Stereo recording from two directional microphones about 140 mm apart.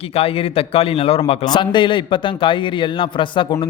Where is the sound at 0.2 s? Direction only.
45° left (ahead or behind).